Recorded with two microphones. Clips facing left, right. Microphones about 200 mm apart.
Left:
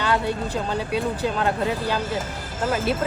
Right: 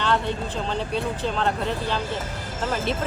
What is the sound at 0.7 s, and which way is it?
Speech, 5° left (ahead or behind).